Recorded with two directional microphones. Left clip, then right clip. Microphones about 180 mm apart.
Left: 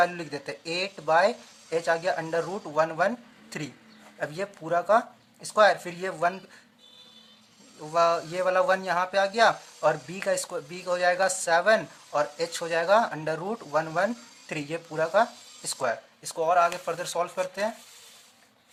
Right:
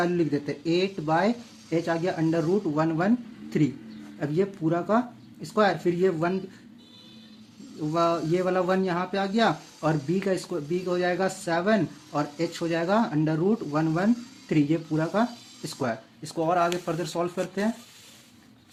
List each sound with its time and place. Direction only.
0.0 s speech: 20° left (ahead or behind)
7.8 s speech: 20° left (ahead or behind)